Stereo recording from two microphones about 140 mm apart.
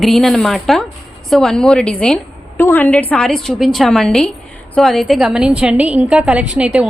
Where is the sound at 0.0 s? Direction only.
Centre (ahead or behind).